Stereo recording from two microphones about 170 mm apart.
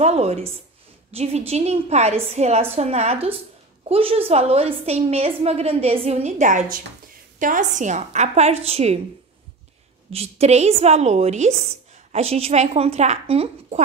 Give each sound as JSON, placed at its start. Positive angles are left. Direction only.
{"t": 0.0, "sound": "a woman's voice", "side_deg": -40}
{"t": 10.1, "sound": "a woman's voice", "side_deg": -40}